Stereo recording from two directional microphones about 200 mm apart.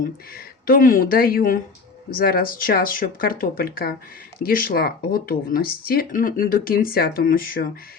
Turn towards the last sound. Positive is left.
turn(degrees=45)  # may be behind; listen again after turning